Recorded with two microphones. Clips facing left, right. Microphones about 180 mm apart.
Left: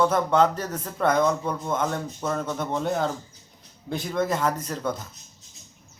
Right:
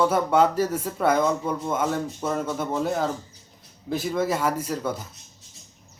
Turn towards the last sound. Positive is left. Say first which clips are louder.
# right 1 dB
turn(degrees=-10)  # may be behind; listen again after turning